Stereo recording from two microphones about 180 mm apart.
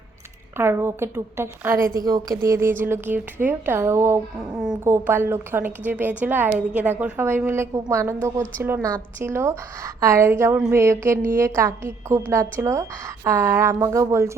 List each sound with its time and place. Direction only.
0.5 s a woman's voice: 15° right (ahead or behind)